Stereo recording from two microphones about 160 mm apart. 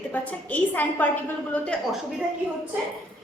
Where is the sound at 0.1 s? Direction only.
10° left (ahead or behind).